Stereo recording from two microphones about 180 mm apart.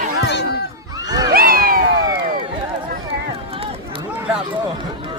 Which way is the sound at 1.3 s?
55° right (ahead or behind).